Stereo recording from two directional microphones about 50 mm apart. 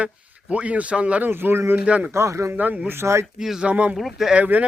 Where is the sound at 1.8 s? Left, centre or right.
Right.